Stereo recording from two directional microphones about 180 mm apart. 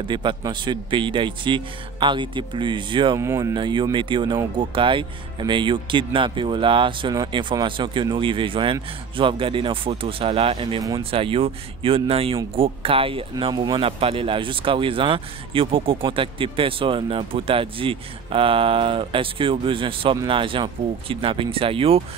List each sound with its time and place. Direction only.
0.1 s speech: 25° right (ahead or behind)
3.2 s speech: 15° right (ahead or behind); by 22.0 s 30° right (ahead or behind)